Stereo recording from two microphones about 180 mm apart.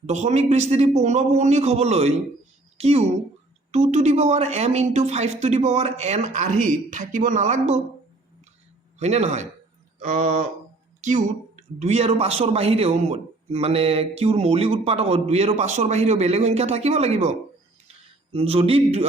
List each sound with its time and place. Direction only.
0.0 s a man's voice: 40° right (ahead or behind)
9.0 s a man's voice: 40° right (ahead or behind)
10.0 s mantra: 50° right (ahead or behind)
11.0 s a man's voice: 45° right (ahead or behind)
17.8 s a sound: 35° right (ahead or behind)